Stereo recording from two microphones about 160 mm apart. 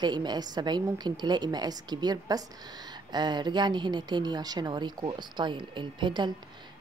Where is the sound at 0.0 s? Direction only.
30° right (ahead or behind).